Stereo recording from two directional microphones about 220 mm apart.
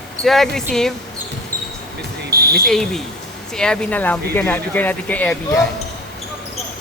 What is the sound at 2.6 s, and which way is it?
Speech, centre (ahead or behind).